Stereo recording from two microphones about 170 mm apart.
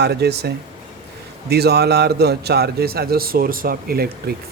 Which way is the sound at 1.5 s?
70° right (ahead or behind).